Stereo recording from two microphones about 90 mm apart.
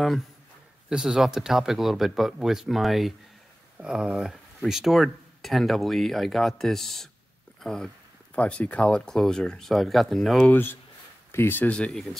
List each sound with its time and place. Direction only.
0.8 s speech: 5° right (ahead or behind)
10.5 s speech: 25° left (ahead or behind)
11.7 s speech: 10° left (ahead or behind)